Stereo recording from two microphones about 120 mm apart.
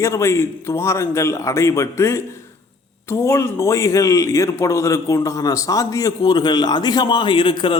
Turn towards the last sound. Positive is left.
turn(degrees=45)  # may be behind; listen again after turning